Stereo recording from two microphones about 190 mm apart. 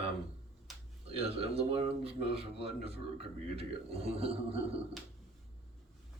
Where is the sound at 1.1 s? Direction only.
30° right (ahead or behind).